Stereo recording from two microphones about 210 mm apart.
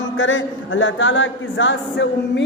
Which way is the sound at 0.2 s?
65° left (ahead or behind).